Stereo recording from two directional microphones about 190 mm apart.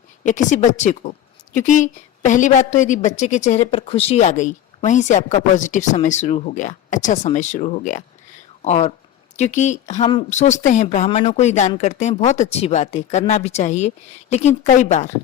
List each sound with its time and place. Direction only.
0.3 s a woman's voice: 40° left (ahead or behind)